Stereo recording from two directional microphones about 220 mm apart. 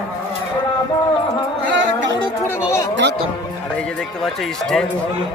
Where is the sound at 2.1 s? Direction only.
15° left (ahead or behind).